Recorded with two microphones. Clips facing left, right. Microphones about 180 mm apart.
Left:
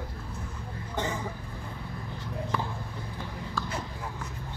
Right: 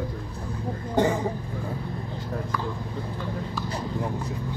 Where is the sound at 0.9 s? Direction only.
50° right (ahead or behind).